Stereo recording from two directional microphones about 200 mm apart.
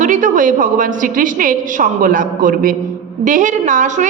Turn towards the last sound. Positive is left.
turn(degrees=-40)  # may be behind; listen again after turning